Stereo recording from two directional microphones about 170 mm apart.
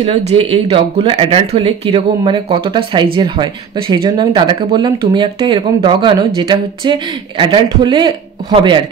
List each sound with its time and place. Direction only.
0.0 s speech: 30° right (ahead or behind)